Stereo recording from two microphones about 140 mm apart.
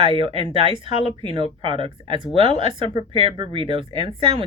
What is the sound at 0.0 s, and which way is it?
Speech, 40° right (ahead or behind).